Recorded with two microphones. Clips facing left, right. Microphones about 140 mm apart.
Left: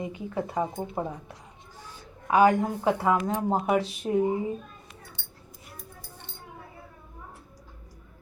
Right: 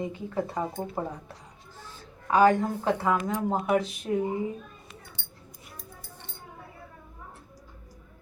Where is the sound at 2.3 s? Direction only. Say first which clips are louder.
Even; 20° left (ahead or behind).